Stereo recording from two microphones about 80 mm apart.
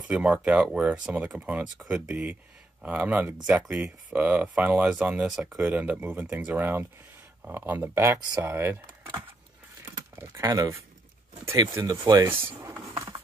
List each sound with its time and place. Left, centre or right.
0.1 s speech: centre
5.2 s speech: centre; by 10.6 s right
11.5 s speech: right
12.4 s speech: right
12.8 s a sound: right